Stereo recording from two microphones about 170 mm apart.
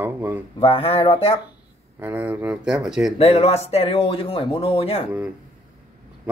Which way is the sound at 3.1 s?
35° left (ahead or behind).